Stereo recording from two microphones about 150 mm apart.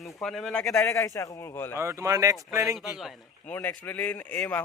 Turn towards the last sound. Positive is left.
turn(degrees=10)  # may be behind; listen again after turning